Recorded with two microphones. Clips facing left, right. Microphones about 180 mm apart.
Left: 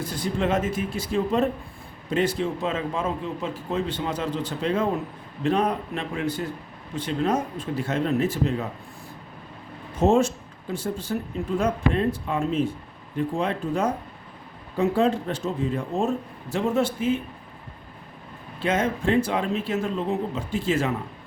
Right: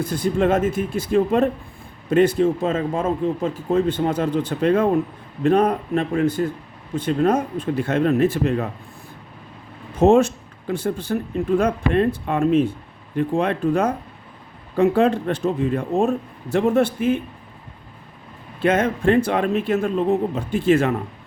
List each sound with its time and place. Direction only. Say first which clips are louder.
0.0 s speech: right 6 dB; 50° right (ahead or behind)
10.0 s speech: right 5 dB; 65° right (ahead or behind)
18.6 s speech: right 6 dB; 60° right (ahead or behind)